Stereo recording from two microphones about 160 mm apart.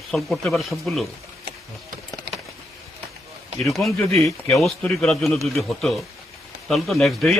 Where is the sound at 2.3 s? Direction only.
75° right (ahead or behind).